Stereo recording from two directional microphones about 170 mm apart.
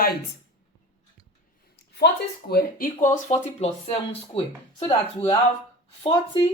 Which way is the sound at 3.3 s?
40° left (ahead or behind).